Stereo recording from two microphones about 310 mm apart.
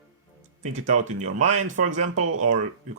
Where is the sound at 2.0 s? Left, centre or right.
Right.